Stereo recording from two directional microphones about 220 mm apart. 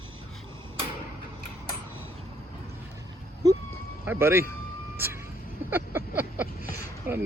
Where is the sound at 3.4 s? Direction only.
15° right (ahead or behind).